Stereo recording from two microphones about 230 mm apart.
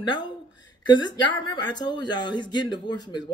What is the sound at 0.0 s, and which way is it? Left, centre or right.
Speech, centre.